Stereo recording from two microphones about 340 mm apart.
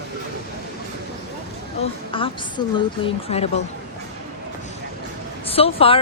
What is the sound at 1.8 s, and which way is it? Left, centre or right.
Speech, centre.